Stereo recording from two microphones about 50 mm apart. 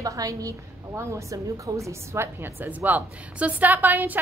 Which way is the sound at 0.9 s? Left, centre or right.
Right.